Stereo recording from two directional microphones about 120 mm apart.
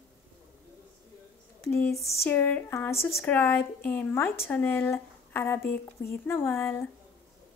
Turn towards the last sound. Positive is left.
turn(degrees=20)  # may be behind; listen again after turning